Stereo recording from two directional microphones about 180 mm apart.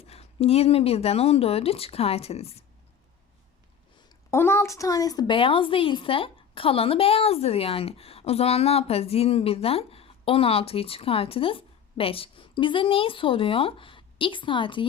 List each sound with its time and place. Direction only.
0.0 s a woman's voice: 35° left (ahead or behind)
4.3 s a woman's voice: 15° left (ahead or behind)